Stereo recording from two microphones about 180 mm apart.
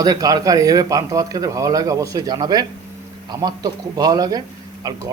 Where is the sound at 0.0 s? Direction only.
20° right (ahead or behind).